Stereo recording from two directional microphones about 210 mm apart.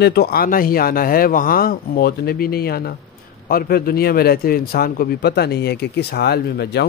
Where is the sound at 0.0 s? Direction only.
50° left (ahead or behind).